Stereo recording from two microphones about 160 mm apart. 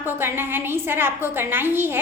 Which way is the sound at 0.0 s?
15° right (ahead or behind).